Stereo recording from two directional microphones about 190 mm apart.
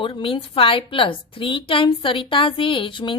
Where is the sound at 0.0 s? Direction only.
25° left (ahead or behind).